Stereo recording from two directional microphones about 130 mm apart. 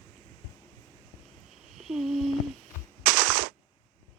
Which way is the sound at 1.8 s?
5° right (ahead or behind).